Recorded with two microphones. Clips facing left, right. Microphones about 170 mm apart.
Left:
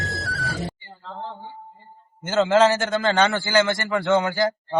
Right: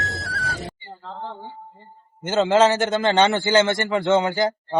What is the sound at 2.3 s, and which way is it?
A man's voice, 20° right (ahead or behind).